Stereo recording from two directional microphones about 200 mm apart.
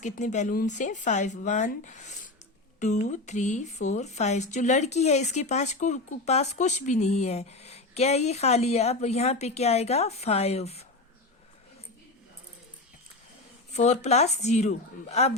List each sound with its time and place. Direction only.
0.0 s speech: 40° left (ahead or behind)
13.7 s speech: 35° left (ahead or behind)